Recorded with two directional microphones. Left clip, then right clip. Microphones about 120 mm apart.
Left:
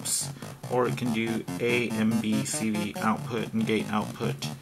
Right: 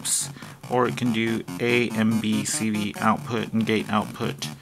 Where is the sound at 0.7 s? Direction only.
35° right (ahead or behind).